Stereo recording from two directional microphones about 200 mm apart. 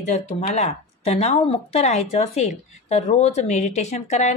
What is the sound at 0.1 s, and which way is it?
Speech, 35° left (ahead or behind).